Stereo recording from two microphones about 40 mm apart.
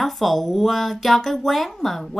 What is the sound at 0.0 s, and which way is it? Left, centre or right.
Speech, centre.